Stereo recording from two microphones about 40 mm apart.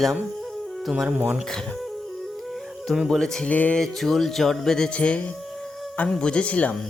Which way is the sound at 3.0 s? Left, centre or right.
Centre.